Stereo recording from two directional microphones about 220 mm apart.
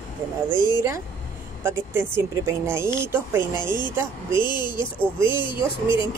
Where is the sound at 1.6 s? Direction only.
10° right (ahead or behind).